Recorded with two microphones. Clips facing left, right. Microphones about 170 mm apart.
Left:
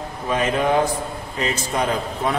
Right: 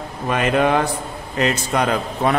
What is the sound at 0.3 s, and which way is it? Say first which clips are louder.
A man's voice: right 2 dB; 65° right (ahead or behind).